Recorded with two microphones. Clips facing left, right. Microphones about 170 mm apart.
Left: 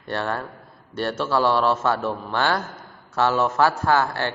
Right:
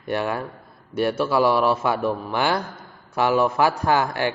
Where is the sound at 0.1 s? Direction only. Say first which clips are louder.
Right 2 dB; 10° right (ahead or behind).